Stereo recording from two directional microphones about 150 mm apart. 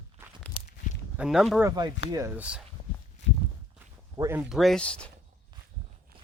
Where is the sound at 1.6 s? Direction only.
30° right (ahead or behind).